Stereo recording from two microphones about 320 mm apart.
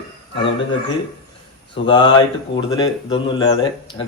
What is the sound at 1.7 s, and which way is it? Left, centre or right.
Speech, centre.